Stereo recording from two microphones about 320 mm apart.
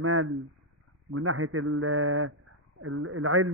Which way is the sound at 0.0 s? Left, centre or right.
Right.